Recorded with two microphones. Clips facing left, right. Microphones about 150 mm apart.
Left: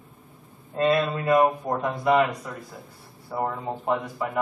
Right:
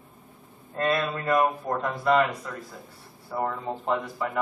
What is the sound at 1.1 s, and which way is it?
A man's voice, 10° left (ahead or behind).